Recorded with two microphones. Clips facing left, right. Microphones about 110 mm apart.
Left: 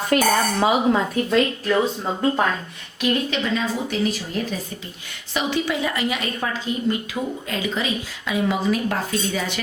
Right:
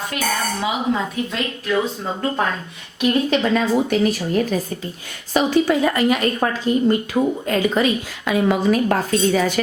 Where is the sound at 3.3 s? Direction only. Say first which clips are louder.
Right 6 dB; 55° right (ahead or behind).